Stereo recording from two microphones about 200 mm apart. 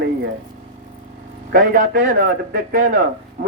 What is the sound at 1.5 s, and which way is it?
A man's voice, 45° right (ahead or behind).